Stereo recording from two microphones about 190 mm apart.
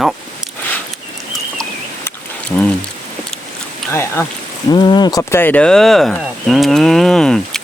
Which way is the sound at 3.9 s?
15° left (ahead or behind).